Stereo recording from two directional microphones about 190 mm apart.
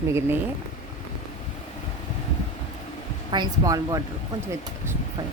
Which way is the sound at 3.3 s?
20° right (ahead or behind).